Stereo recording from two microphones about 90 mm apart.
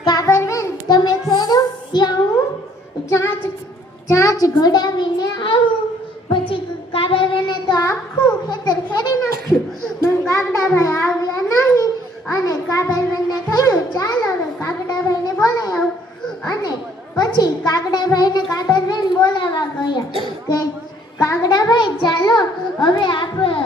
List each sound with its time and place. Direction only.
0.0 s child singing: 50° left (ahead or behind)
0.3 s child singing: 35° left (ahead or behind)
0.9 s music: 50° left (ahead or behind)
1.3 s child singing: 45° left (ahead or behind)
4.1 s a child's voice: 35° left (ahead or behind); by 5.7 s 65° left (ahead or behind)
6.5 s child singing: 85° left; by 7.9 s 55° left (ahead or behind)
8.4 s a sound: 50° left (ahead or behind)
10.0 s a sound: 35° left (ahead or behind)
12.3 s music: 40° left (ahead or behind)
15.4 s a sound: 40° left (ahead or behind)
16.5 s children playing: 40° left (ahead or behind)
17.2 s a sound: 45° left (ahead or behind); by 23.6 s 70° left (ahead or behind)